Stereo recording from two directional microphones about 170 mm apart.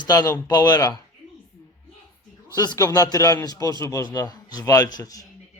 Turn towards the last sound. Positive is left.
turn(degrees=20)  # may be behind; listen again after turning